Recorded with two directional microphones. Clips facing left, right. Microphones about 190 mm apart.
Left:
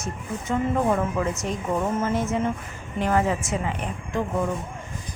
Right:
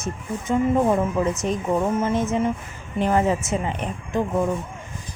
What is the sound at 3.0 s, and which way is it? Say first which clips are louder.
Speech: right 2 dB; 20° right (ahead or behind).